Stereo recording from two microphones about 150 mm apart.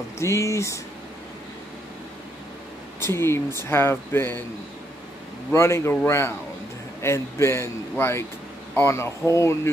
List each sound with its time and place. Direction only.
0.2 s speech: 20° left (ahead or behind)
3.0 s speech: 15° left (ahead or behind)
5.5 s speech: 20° left (ahead or behind)